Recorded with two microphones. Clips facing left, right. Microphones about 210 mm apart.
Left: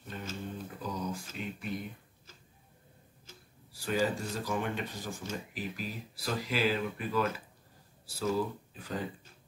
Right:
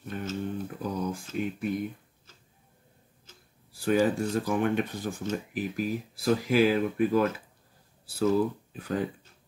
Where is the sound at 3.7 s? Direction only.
55° right (ahead or behind).